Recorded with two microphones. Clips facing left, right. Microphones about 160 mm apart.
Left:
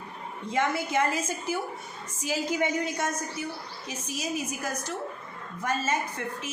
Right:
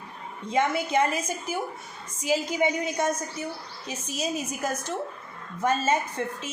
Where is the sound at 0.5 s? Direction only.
20° right (ahead or behind).